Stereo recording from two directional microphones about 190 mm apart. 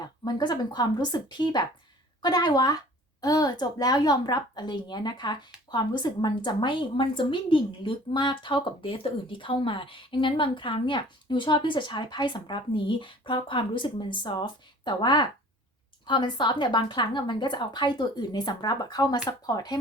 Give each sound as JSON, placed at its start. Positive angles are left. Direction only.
{"t": 0.0, "sound": "a woman's voice", "side_deg": 20}